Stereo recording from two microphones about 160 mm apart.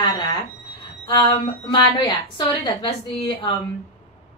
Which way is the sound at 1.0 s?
30° left (ahead or behind).